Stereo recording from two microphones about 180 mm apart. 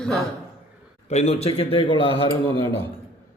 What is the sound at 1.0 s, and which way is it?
A man's voice, 35° left (ahead or behind).